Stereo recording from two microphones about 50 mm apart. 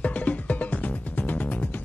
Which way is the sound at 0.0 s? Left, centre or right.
Left.